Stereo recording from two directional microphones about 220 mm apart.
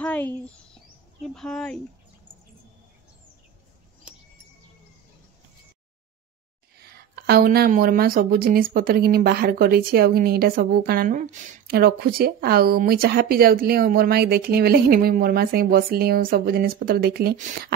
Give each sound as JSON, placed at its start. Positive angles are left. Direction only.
{"t": 0.0, "sound": "speech", "side_deg": 5}
{"t": 6.8, "sound": "speech", "side_deg": -45}